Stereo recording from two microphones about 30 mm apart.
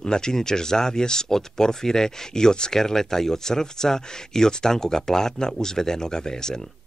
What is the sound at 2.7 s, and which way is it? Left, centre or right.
Speech, centre.